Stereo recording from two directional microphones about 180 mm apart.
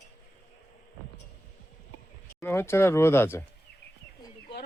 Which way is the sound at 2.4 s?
15° left (ahead or behind).